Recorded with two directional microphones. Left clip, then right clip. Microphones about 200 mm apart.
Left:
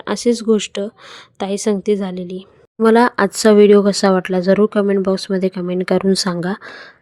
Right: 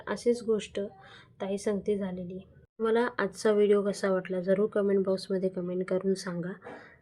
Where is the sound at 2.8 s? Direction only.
40° left (ahead or behind).